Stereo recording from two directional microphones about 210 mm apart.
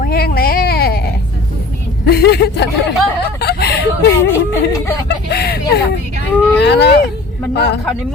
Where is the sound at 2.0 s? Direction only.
50° left (ahead or behind).